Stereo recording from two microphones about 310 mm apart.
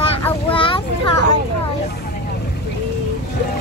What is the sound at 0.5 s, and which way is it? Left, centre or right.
Boat, centre.